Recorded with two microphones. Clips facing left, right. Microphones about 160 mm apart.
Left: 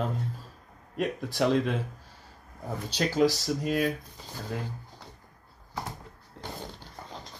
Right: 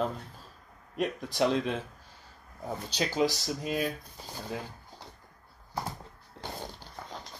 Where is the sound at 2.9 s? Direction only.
Centre (ahead or behind).